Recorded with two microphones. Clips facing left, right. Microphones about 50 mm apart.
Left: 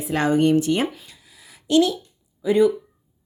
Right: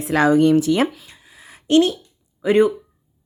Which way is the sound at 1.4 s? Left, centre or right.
Right.